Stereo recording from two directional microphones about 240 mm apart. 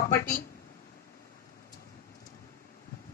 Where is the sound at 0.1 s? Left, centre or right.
Left.